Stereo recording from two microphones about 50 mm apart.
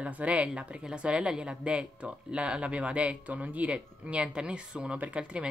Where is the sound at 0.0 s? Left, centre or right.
Right.